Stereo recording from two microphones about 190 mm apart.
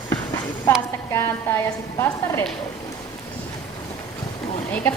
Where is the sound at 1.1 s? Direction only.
15° left (ahead or behind).